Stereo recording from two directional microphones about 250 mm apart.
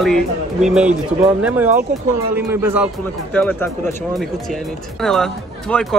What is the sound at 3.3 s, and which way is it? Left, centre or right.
Speech, centre.